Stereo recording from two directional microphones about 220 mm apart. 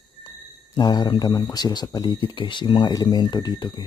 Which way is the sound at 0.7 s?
20° left (ahead or behind).